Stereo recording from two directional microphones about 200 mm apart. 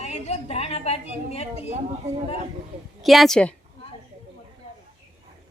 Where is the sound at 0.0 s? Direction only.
30° left (ahead or behind).